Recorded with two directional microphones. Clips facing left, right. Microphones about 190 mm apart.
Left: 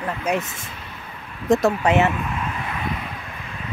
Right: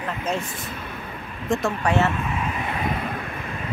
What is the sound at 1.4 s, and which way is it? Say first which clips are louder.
Speech: left 6 dB; 40° left (ahead or behind).